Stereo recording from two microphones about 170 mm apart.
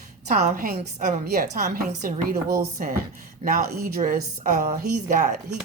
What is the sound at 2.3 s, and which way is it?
A woman's voice, 60° right (ahead or behind).